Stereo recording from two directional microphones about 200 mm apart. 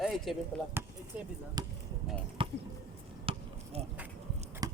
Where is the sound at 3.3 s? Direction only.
30° right (ahead or behind).